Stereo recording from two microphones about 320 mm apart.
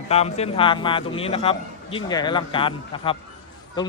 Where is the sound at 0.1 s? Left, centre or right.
Centre.